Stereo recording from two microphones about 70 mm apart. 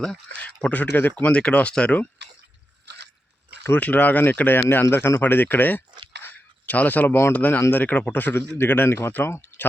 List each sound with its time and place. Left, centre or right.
0.3 s speech: left
3.6 s speech: left
6.2 s a sound: left
7.3 s speech: left